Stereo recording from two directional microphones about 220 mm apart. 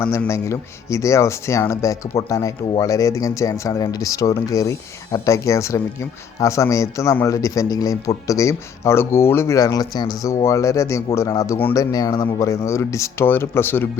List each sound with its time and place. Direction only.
0.0 s speech: 10° left (ahead or behind)